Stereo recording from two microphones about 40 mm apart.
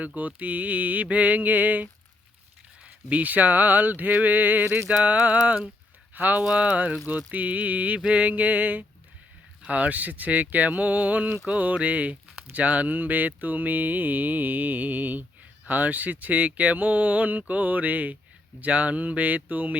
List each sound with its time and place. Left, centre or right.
0.0 s mantra: right
2.8 s speech: right
5.0 s mantra: right
6.1 s speech: right
6.6 s mantra: right
11.4 s speech: right
15.6 s mantra: right